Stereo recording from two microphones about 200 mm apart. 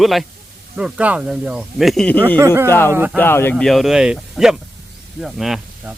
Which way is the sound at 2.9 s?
10° right (ahead or behind).